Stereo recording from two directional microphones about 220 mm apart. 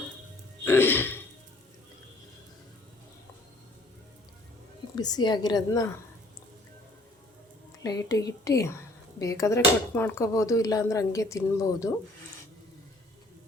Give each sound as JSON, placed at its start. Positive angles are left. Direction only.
{"t": 0.6, "sound": "throat clearing", "side_deg": 10}
{"t": 4.9, "sound": "a woman's voice", "side_deg": 20}
{"t": 7.9, "sound": "speech", "side_deg": 15}